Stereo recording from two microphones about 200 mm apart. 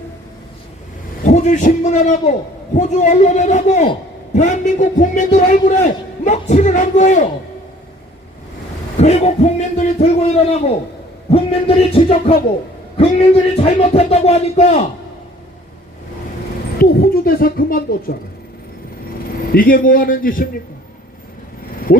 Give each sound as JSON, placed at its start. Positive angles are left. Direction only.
{"t": 1.2, "sound": "a man's voice", "side_deg": 35}
{"t": 9.0, "sound": "a man's voice", "side_deg": 35}
{"t": 11.3, "sound": "music", "side_deg": 30}
{"t": 13.0, "sound": "a man's voice", "side_deg": 30}
{"t": 16.7, "sound": "a sound", "side_deg": 45}
{"t": 19.5, "sound": "a man's voice", "side_deg": 45}